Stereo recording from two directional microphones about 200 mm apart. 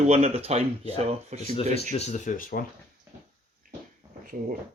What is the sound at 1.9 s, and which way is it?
Speech, 35° left (ahead or behind).